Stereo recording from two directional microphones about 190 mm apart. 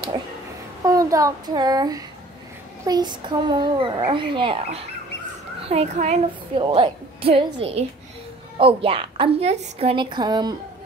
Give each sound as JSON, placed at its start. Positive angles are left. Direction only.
{"t": 0.8, "sound": "a child's voice", "side_deg": -15}
{"t": 5.7, "sound": "a child's voice", "side_deg": -35}